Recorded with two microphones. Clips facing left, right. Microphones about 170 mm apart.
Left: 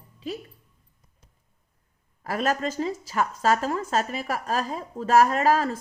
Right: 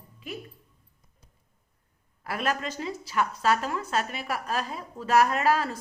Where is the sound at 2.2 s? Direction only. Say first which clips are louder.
Left 4 dB; 40° left (ahead or behind).